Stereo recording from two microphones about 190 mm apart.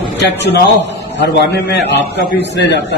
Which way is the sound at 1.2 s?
65° left (ahead or behind).